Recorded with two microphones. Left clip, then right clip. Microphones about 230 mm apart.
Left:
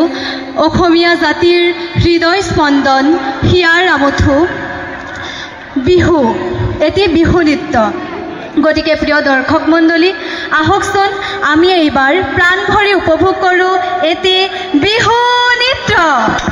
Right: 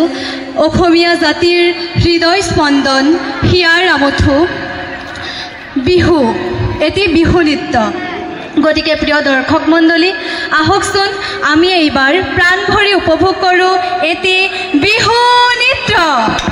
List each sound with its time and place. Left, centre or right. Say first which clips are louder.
0.6 s a man's voice: even; right
5.9 s a man's voice: left 1 dB; right